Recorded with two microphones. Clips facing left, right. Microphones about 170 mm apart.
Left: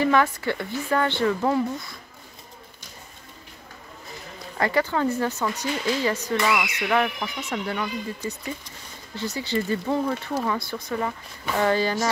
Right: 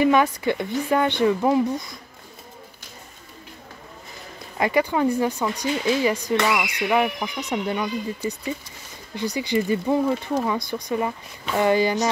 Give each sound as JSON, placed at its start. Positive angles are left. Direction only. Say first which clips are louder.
{"t": 0.0, "sound": "speech", "louder": "right 3 dB", "side_deg": -15}
{"t": 4.6, "sound": "speech", "louder": "right 2 dB", "side_deg": -15}